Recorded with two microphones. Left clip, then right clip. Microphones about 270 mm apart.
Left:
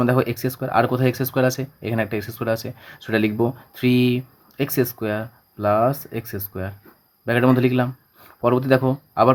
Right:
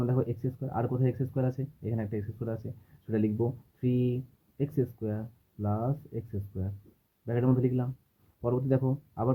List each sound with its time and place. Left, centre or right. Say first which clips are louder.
0.0 s speech: left 12 dB; left
7.3 s speech: left 11 dB; left